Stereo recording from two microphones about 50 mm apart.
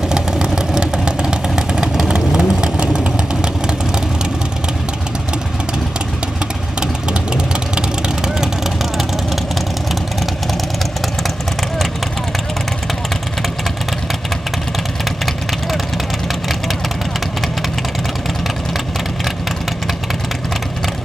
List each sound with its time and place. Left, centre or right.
0.1 s vehicle: centre
6.8 s vehicle: centre